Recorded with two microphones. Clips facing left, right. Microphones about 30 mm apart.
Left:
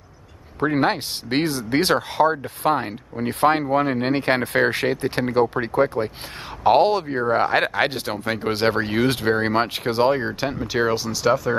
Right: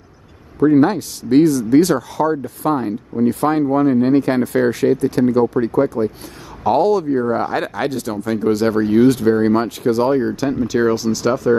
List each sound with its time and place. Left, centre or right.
0.6 s speech: left; by 11.5 s centre